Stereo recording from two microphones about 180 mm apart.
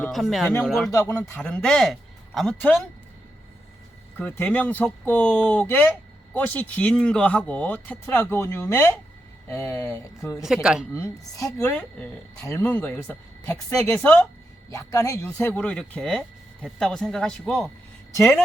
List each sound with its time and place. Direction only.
0.0 s speech: centre (ahead or behind)
0.9 s speech: 20° left (ahead or behind)
1.3 s speech: 5° left (ahead or behind)
4.2 s speech: 10° left (ahead or behind)
10.4 s speech: 5° right (ahead or behind)
10.9 s speech: 15° left (ahead or behind)
14.7 s speech: 20° left (ahead or behind)